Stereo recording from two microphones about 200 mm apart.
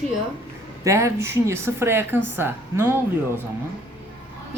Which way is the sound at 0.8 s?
15° right (ahead or behind).